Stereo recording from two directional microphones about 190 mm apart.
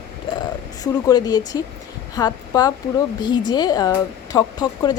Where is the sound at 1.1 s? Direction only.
20° left (ahead or behind).